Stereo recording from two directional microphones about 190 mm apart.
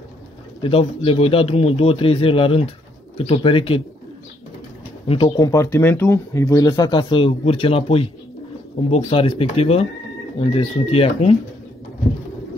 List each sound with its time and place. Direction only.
0.6 s speech: 30° left (ahead or behind)
5.0 s speech: 25° left (ahead or behind)